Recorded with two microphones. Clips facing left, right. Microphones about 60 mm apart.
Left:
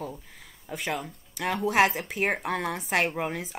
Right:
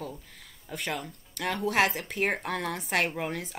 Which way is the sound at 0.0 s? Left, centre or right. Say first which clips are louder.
Left 2 dB; centre.